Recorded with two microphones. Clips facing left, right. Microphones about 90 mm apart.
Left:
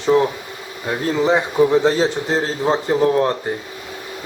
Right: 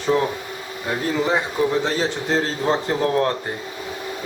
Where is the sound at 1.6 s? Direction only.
15° left (ahead or behind).